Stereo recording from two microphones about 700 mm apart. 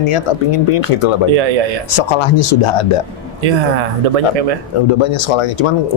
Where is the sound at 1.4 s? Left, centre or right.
Right.